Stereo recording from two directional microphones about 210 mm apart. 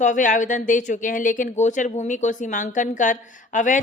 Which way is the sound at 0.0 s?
35° left (ahead or behind).